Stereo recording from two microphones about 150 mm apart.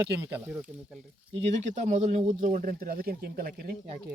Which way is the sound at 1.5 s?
50° right (ahead or behind).